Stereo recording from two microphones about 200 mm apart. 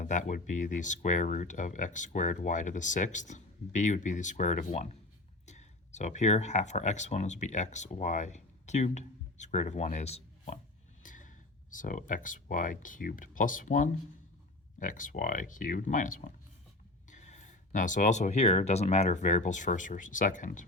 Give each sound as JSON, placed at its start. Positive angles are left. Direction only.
{"t": 0.0, "sound": "speech", "side_deg": 40}